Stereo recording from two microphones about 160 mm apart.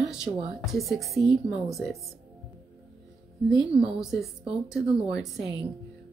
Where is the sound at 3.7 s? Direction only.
35° right (ahead or behind).